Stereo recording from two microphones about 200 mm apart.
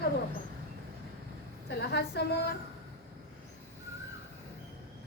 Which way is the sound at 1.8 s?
55° left (ahead or behind).